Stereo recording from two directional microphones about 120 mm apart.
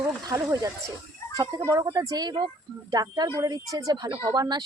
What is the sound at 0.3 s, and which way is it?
Speech, 30° right (ahead or behind).